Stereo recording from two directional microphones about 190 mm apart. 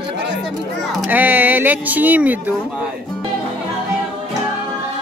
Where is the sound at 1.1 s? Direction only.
10° right (ahead or behind).